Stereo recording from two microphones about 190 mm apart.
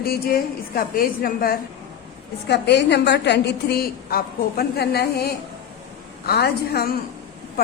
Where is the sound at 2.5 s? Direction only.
65° left (ahead or behind).